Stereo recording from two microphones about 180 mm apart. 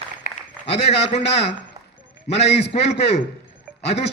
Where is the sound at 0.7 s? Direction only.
35° left (ahead or behind).